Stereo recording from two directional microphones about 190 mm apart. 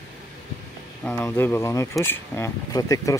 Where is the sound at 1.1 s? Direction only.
10° left (ahead or behind).